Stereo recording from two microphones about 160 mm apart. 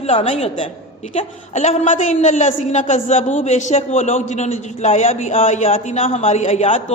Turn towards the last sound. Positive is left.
turn(degrees=45)  # may be behind; listen again after turning